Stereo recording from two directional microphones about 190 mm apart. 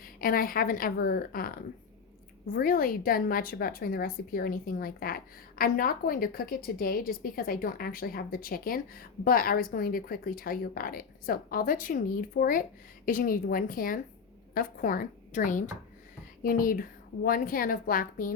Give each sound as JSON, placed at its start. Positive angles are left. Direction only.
{"t": 0.0, "sound": "a woman's voice", "side_deg": 50}